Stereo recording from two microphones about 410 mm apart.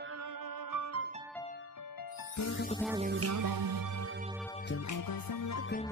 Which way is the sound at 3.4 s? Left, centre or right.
Right.